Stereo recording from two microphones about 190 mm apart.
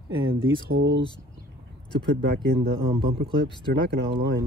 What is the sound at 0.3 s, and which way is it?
Speech, 85° right.